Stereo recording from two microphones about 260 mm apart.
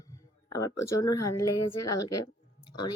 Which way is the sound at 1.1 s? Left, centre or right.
Left.